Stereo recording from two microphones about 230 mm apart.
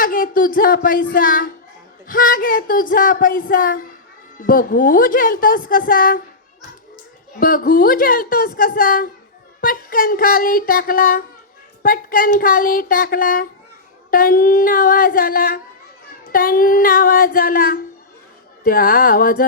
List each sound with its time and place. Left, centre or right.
0.0 s a woman's voice: left
7.3 s a woman's voice: left